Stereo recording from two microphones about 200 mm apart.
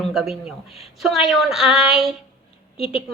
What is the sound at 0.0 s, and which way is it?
A woman's voice, centre (ahead or behind).